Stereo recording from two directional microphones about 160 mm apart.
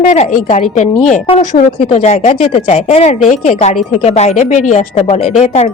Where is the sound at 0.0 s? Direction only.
45° left (ahead or behind).